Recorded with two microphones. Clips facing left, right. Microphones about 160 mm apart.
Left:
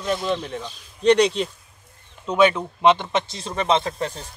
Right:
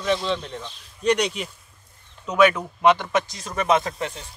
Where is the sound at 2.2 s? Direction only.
25° left (ahead or behind).